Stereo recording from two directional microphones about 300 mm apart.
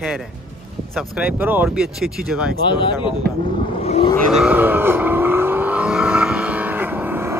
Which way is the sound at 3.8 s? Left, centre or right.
Centre.